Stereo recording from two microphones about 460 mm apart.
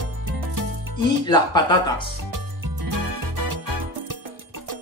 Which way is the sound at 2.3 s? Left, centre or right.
Right.